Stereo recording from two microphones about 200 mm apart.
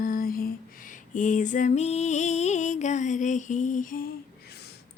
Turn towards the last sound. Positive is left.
turn(degrees=40)  # may be behind; listen again after turning